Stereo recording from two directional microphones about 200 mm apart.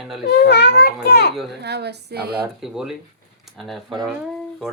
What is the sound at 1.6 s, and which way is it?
Speech, 55° right (ahead or behind).